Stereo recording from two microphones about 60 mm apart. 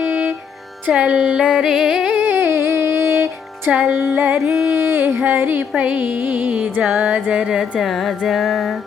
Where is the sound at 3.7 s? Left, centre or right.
Centre.